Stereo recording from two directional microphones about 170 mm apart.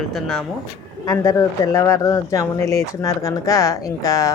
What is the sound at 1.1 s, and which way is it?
Speech, 20° left (ahead or behind).